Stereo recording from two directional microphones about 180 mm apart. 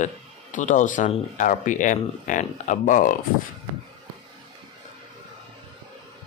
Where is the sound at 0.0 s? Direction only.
45° left (ahead or behind).